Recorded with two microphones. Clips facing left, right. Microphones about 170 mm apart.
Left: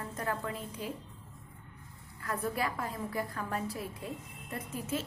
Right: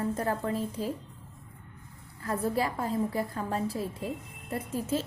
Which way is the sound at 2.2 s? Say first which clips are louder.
Right 5 dB; 30° right (ahead or behind).